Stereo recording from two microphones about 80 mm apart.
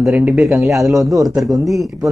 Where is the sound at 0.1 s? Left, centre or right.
Centre.